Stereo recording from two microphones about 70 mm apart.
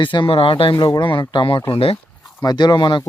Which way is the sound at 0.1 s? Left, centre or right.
Left.